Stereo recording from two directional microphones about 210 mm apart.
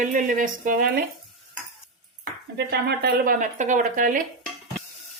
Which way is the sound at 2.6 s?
50° right (ahead or behind).